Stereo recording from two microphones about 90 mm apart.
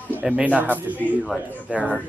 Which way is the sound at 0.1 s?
20° right (ahead or behind).